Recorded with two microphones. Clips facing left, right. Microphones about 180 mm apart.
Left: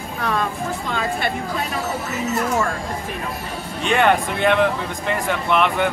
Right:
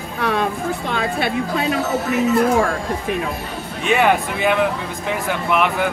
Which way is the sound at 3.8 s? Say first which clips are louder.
Right 1 dB; 5° right (ahead or behind).